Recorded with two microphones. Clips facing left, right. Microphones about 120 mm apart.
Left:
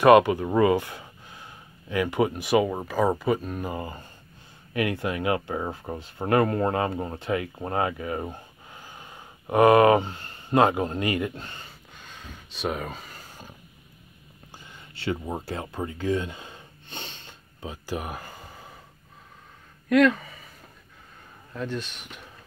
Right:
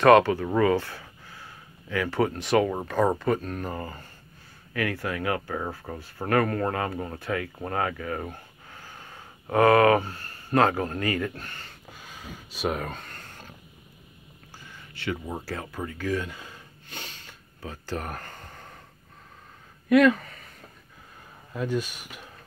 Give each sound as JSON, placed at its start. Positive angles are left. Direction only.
{"t": 0.0, "sound": "speech", "side_deg": 15}
{"t": 11.9, "sound": "a sound", "side_deg": -5}
{"t": 14.6, "sound": "a sound", "side_deg": 25}
{"t": 15.2, "sound": "gasp", "side_deg": 20}
{"t": 19.9, "sound": "speech", "side_deg": 0}
{"t": 21.5, "sound": "speech", "side_deg": -5}